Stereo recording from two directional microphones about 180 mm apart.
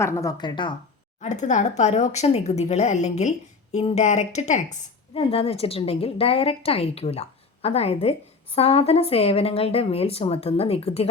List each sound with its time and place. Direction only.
0.0 s a woman's voice: 20° left (ahead or behind)
1.2 s speech: 40° left (ahead or behind)